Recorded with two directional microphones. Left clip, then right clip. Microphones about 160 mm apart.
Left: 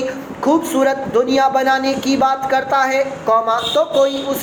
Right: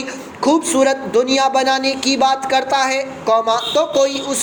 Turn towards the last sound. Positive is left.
turn(degrees=-35)  # may be behind; listen again after turning